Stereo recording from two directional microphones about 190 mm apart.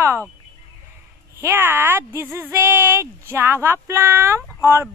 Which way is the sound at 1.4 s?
10° right (ahead or behind).